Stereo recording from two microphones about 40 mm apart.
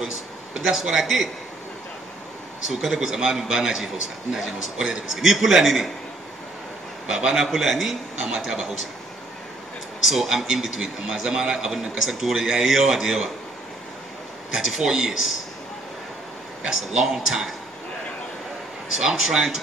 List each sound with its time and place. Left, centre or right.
0.7 s a man's voice: centre
2.7 s a man's voice: centre
7.1 s a man's voice: centre
7.4 s a man's voice: centre
10.0 s a man's voice: centre
14.5 s a man's voice: centre
16.6 s a man's voice: centre
18.9 s a man's voice: centre